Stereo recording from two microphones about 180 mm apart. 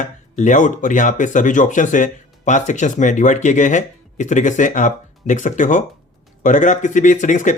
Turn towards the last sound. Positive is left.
turn(degrees=45)  # may be behind; listen again after turning